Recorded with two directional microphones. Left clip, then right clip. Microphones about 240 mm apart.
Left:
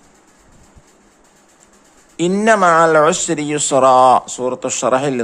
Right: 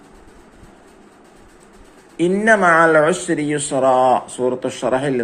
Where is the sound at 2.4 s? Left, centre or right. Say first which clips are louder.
Left 2 dB; left.